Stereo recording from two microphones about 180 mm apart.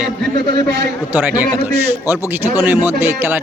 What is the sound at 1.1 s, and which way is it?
Speech, 10° right (ahead or behind).